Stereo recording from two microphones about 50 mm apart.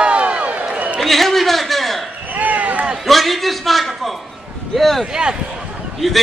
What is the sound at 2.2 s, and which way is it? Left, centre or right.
Basketball bounce, right.